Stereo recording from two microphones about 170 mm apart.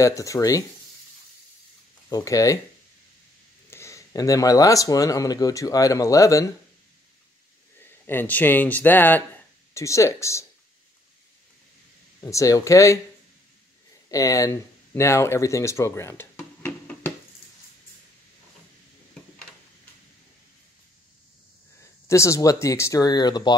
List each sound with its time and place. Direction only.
0.0 s speech: 20° left (ahead or behind)
2.0 s speech: 20° left (ahead or behind)
3.7 s speech: 15° left (ahead or behind)
8.1 s speech: 10° left (ahead or behind)
12.2 s speech: 20° left (ahead or behind)
14.0 s speech: 20° left (ahead or behind)
22.0 s speech: 15° left (ahead or behind)